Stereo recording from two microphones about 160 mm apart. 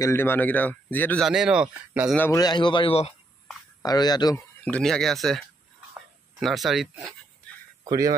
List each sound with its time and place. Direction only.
0.0 s a man's voice: 15° left (ahead or behind)
1.2 s speech: 5° right (ahead or behind)
2.1 s a man's voice: 15° left (ahead or behind)
2.4 s a man's voice: 30° left (ahead or behind)
3.8 s speech: 25° left (ahead or behind)
4.6 s speech: 5° left (ahead or behind)
5.9 s a sound: centre (ahead or behind)
7.8 s speech: 20° right (ahead or behind)